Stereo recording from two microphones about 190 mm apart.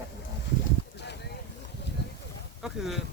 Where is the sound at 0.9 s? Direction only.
65° left (ahead or behind).